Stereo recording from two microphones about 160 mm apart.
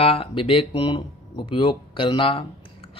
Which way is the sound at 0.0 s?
35° left (ahead or behind).